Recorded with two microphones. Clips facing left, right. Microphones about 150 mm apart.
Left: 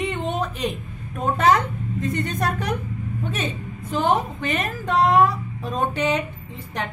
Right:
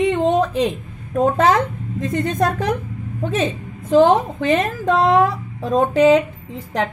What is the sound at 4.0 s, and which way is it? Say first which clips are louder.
A woman's voice: right 5 dB; 90° right.